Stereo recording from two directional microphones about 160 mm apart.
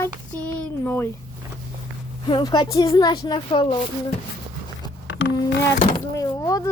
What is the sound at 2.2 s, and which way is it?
A woman's voice, 30° left (ahead or behind).